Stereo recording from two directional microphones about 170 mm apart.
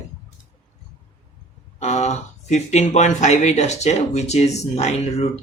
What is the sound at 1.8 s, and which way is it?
Speech, 40° left (ahead or behind).